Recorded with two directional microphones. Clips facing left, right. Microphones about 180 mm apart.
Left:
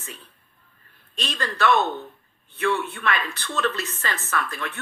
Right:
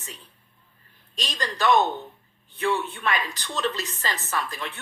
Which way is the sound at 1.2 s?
15° right (ahead or behind).